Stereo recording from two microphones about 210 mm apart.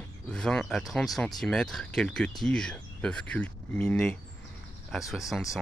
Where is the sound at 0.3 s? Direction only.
5° left (ahead or behind).